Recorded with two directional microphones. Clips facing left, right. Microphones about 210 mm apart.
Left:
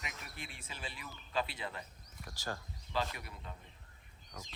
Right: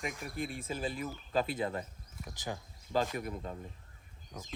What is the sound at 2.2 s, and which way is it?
Speech, 20° right (ahead or behind).